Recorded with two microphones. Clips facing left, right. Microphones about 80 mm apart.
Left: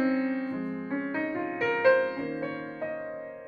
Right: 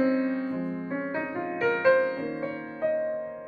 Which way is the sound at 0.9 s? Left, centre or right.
Centre.